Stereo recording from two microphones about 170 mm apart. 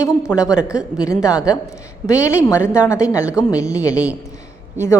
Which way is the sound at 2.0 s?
15° left (ahead or behind).